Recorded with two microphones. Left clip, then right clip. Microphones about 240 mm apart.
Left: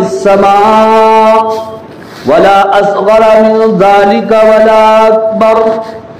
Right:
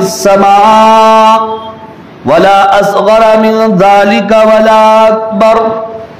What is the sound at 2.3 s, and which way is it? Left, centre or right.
A man's voice, right.